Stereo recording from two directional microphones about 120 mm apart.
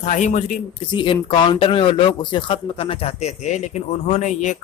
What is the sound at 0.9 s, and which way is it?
Speech, 45° left (ahead or behind).